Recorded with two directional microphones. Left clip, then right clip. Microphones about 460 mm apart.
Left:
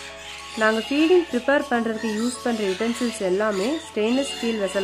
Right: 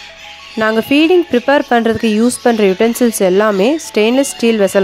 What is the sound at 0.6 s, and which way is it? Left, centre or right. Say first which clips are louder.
Speech: right 8 dB; centre.